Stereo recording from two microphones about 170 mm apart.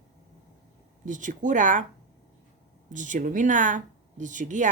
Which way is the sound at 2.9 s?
50° right (ahead or behind).